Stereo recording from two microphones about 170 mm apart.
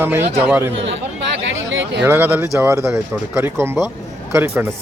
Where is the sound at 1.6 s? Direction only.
90° right.